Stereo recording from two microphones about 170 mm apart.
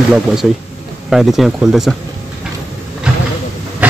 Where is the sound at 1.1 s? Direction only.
Centre (ahead or behind).